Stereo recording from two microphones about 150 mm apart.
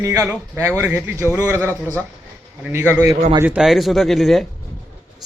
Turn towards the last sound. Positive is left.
turn(degrees=0)  # may be behind; listen again after turning